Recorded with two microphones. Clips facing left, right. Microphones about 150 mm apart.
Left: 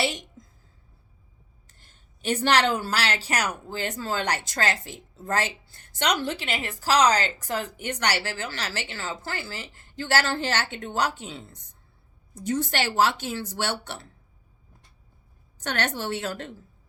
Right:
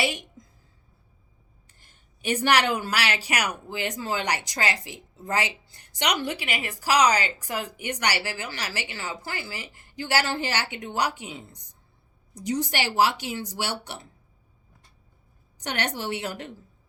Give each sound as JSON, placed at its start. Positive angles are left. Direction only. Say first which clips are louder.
{"t": 0.0, "sound": "speech", "louder": "even", "side_deg": -10}
{"t": 1.6, "sound": "speech", "louder": "left 1 dB", "side_deg": -15}
{"t": 15.5, "sound": "speech", "louder": "left 1 dB", "side_deg": -15}